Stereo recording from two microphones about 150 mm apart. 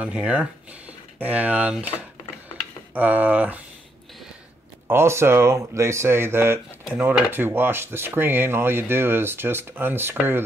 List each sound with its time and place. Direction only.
0.0 s speech: 10° right (ahead or behind)
2.9 s speech: 10° right (ahead or behind)
4.8 s speech: 15° right (ahead or behind)